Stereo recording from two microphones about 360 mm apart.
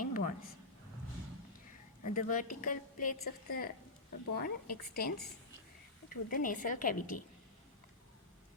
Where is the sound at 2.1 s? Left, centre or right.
Left.